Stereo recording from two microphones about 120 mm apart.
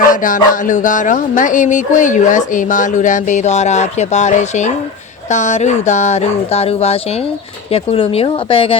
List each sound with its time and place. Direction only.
0.1 s a woman's voice: 90° left; by 8.7 s 50° left (ahead or behind)